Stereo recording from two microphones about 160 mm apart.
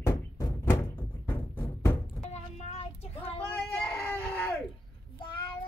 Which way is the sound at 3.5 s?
10° left (ahead or behind).